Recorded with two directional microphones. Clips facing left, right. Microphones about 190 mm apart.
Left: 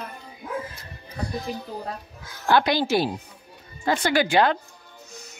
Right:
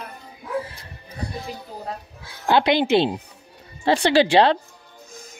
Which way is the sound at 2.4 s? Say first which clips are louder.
Right 2 dB; 20° right (ahead or behind).